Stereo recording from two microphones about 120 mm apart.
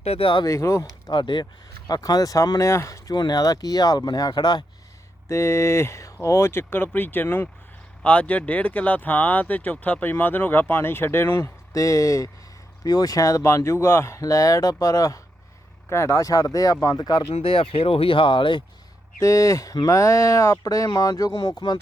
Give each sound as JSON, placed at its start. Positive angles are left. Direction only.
{"t": 0.0, "sound": "speech", "side_deg": 55}
{"t": 0.4, "sound": "speech", "side_deg": 25}
{"t": 1.1, "sound": "speech", "side_deg": 40}
{"t": 5.3, "sound": "speech", "side_deg": 25}
{"t": 17.3, "sound": "speech", "side_deg": 50}
{"t": 19.2, "sound": "speech", "side_deg": 30}